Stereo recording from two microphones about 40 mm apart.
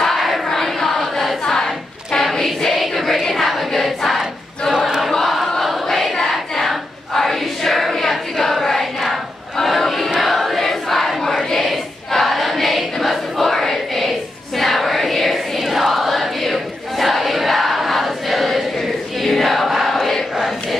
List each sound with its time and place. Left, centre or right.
0.0 s choir: centre
2.1 s choir: centre
2.6 s music: centre
3.3 s choir: centre
4.7 s choir: centre
5.2 s choir: centre
6.5 s a sound: centre
10.2 s choir: centre